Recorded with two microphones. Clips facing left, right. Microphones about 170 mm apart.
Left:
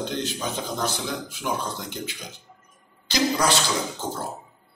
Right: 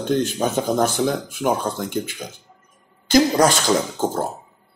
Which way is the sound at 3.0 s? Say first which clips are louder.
Right 7 dB; 50° right (ahead or behind).